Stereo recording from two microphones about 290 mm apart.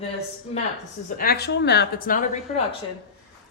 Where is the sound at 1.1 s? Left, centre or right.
Left.